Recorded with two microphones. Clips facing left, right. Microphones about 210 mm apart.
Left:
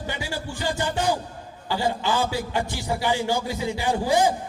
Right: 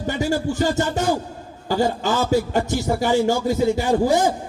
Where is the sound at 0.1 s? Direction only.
45° right (ahead or behind).